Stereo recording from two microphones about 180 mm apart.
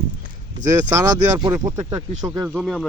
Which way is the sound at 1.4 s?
25° right (ahead or behind).